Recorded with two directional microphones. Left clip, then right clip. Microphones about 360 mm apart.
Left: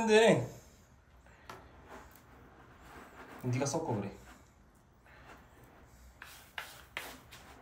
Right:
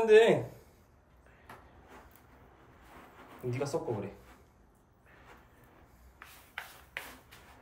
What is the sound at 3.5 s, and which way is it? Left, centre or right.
Speech, centre.